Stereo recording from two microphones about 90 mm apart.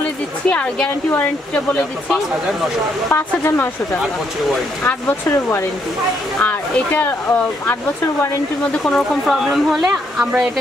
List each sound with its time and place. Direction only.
0.5 s speech: 15° left (ahead or behind)
3.1 s speech: 25° left (ahead or behind)
8.7 s speech: 10° left (ahead or behind)